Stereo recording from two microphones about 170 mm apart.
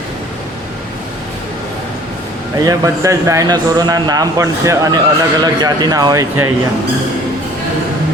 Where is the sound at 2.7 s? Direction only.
20° right (ahead or behind).